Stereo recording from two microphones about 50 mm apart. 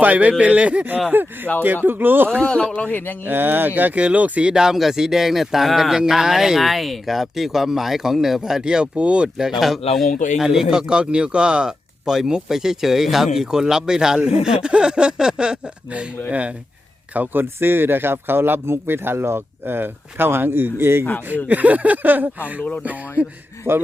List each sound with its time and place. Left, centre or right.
0.0 s speech: right
1.1 s speech: right
2.4 s speech: centre
2.8 s speech: left
3.2 s speech: right
4.5 s a man's voice: centre
9.4 s a man's voice: centre; by 16.6 s right
17.2 s speech: right
21.2 s speech: right
23.7 s speech: right